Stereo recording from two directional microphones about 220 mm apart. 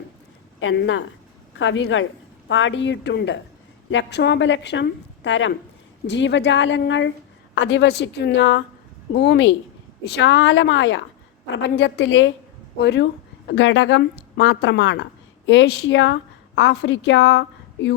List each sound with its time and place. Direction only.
0.6 s a woman's voice: 55° left (ahead or behind)